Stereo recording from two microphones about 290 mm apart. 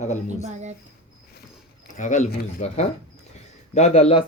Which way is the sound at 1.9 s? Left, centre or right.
Left.